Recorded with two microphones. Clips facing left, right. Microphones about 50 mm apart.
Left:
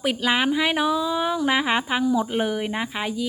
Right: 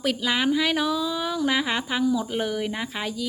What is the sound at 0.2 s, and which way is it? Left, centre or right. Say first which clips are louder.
Speech: left 3 dB; left.